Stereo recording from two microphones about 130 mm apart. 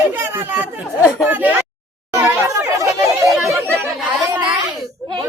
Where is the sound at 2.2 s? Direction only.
25° right (ahead or behind).